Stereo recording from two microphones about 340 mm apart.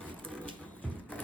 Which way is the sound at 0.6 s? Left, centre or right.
Centre.